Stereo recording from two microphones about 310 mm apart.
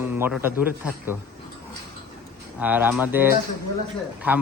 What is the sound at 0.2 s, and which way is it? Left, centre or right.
Speech, centre.